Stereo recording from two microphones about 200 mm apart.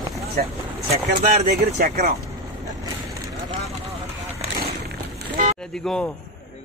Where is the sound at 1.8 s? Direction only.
50° right (ahead or behind).